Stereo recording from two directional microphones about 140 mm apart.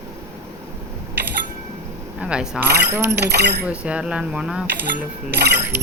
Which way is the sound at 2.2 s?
5° right (ahead or behind).